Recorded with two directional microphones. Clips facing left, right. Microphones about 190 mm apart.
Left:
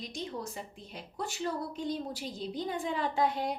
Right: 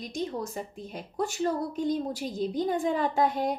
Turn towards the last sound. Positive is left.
turn(degrees=-45)  # may be behind; listen again after turning